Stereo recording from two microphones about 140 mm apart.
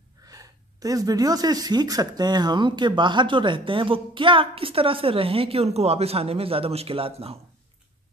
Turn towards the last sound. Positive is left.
turn(degrees=-45)  # may be behind; listen again after turning